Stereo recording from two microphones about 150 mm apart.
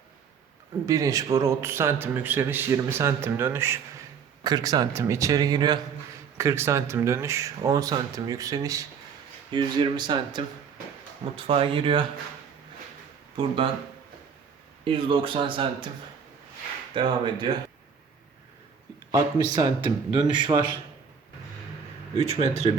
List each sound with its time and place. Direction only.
0.9 s a man's voice: 20° right (ahead or behind)
4.4 s speech: 25° right (ahead or behind)
14.8 s speech: 35° right (ahead or behind)
16.9 s speech: 35° right (ahead or behind)
19.1 s speech: 30° right (ahead or behind)
22.2 s speech: 40° right (ahead or behind)